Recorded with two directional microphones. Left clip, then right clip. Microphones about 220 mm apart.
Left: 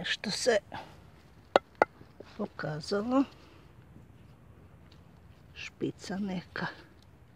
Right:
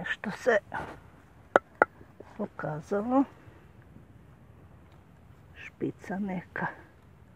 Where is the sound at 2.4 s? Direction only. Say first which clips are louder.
Right 1 dB; 5° left (ahead or behind).